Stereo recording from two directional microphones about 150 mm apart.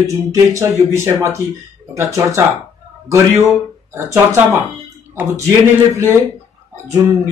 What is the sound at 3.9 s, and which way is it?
Speech, 15° right (ahead or behind).